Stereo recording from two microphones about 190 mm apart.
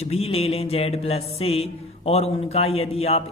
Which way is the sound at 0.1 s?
30° left (ahead or behind).